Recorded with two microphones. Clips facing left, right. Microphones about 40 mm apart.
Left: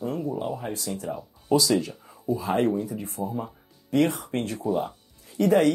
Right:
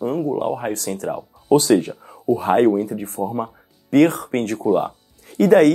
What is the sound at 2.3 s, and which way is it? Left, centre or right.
Speech, right.